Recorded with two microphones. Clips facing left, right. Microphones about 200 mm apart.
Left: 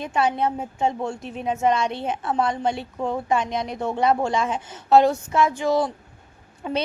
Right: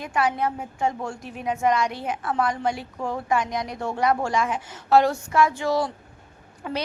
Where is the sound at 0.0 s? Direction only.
25° left (ahead or behind).